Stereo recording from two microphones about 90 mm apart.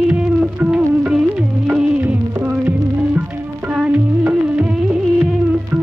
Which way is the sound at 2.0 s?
25° right (ahead or behind).